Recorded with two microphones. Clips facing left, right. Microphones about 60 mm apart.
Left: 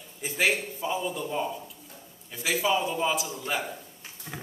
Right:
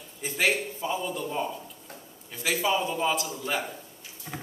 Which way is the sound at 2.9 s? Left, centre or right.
Centre.